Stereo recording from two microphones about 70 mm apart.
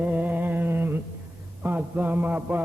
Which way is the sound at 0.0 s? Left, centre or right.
Right.